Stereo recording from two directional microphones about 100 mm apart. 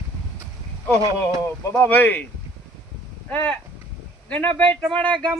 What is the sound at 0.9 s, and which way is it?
Speech, 35° right (ahead or behind).